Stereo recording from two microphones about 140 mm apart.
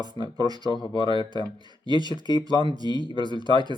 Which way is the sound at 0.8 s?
35° left (ahead or behind).